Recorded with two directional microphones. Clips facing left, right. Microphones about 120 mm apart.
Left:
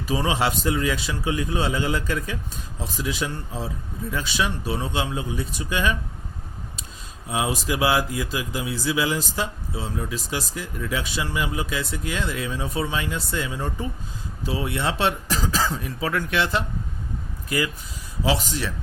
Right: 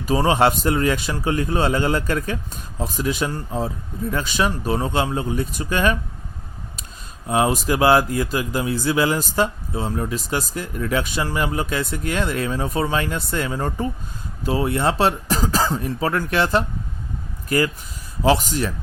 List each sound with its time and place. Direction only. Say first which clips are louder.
0.0 s speech: right 6 dB; 50° right (ahead or behind)
7.3 s speech: right 6 dB; 50° right (ahead or behind)
18.2 s speech: right 6 dB; 50° right (ahead or behind)